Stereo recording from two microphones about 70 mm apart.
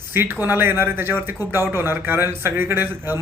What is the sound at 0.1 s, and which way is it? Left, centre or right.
A man's voice, right.